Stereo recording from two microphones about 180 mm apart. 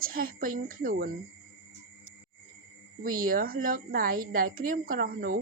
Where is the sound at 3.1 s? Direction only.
50° right (ahead or behind).